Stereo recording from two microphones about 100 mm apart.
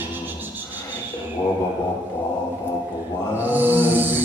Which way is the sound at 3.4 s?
20° right (ahead or behind).